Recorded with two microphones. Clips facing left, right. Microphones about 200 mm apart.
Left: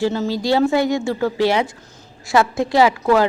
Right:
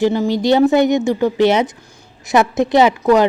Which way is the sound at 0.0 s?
15° right (ahead or behind).